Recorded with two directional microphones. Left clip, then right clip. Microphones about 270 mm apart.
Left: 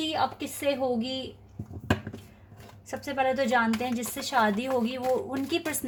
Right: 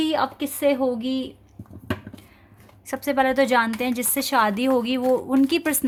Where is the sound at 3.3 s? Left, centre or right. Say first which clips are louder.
Right 6 dB; right.